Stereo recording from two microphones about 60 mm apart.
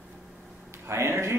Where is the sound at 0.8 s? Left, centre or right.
Right.